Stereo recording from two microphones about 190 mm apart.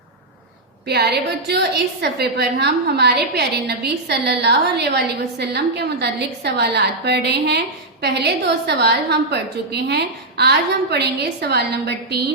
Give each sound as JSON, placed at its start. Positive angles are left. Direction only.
{"t": 0.9, "sound": "a woman's voice", "side_deg": -60}